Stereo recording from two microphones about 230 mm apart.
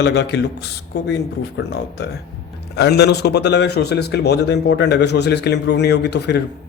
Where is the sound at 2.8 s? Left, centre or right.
Left.